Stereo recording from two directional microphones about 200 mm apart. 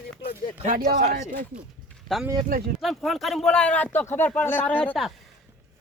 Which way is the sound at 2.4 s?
45° right (ahead or behind).